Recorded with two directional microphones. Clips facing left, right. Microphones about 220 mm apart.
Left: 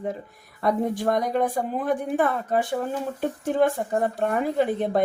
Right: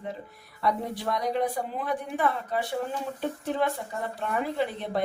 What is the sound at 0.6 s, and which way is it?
Speech, 50° left (ahead or behind).